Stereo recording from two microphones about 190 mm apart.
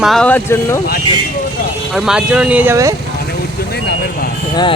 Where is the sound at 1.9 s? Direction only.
Centre (ahead or behind).